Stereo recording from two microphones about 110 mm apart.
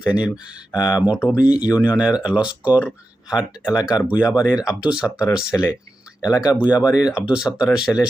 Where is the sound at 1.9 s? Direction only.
10° right (ahead or behind).